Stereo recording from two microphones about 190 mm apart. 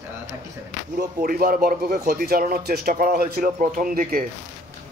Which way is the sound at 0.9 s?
50° right (ahead or behind).